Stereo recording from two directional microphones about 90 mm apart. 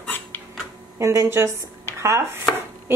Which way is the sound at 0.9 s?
30° right (ahead or behind).